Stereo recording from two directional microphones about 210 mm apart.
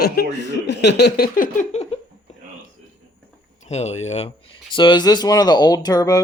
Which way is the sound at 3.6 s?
30° left (ahead or behind).